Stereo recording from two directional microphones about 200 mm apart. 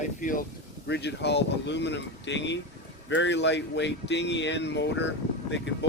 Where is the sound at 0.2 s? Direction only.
40° left (ahead or behind).